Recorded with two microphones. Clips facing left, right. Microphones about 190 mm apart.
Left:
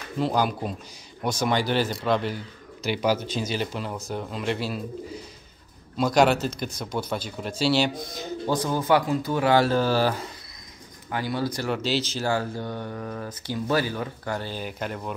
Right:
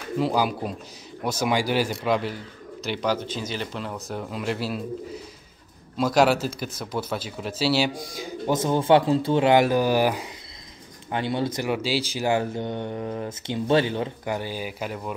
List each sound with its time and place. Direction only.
0.2 s speech: 5° right (ahead or behind)
2.8 s speech: 5° left (ahead or behind)
8.5 s speech: 20° right (ahead or behind); by 15.1 s 5° right (ahead or behind)